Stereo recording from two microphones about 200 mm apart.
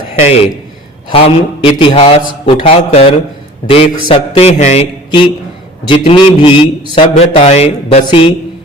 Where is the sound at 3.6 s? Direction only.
25° left (ahead or behind).